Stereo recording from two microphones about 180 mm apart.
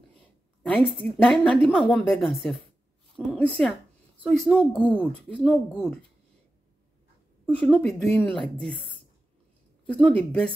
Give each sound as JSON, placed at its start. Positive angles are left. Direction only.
{"t": 0.7, "sound": "speech", "side_deg": 0}
{"t": 7.4, "sound": "a woman's voice", "side_deg": 10}
{"t": 10.0, "sound": "a woman's voice", "side_deg": 5}